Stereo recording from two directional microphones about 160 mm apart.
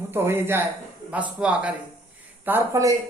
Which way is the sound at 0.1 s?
15° right (ahead or behind).